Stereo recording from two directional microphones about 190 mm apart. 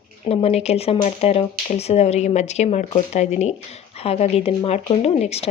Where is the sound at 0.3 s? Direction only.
35° left (ahead or behind).